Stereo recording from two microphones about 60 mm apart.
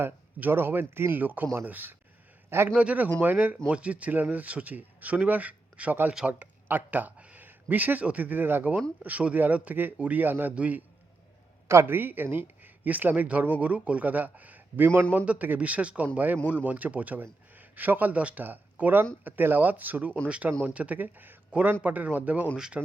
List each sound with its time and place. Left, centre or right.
0.3 s speech: right
2.5 s a man's voice: right
2.7 s speech: right
9.0 s speech: right
11.7 s a man's voice: right
11.9 s speech: right
22.5 s speech: centre